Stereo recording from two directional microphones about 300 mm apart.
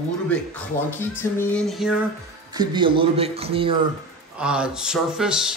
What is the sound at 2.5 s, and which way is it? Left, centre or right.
A man's voice, centre.